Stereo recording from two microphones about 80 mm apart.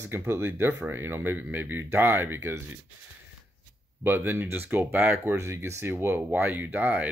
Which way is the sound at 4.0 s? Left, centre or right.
Right.